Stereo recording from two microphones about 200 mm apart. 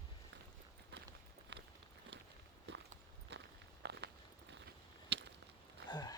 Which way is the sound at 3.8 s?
60° right (ahead or behind).